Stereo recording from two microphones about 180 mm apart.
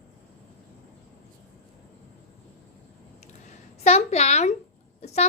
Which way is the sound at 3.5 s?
40° left (ahead or behind).